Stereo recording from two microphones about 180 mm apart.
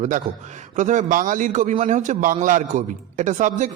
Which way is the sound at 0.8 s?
45° right (ahead or behind).